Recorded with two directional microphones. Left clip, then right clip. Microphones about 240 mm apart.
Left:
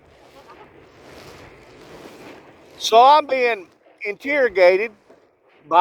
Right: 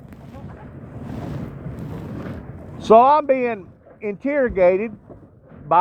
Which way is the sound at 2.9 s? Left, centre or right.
Left.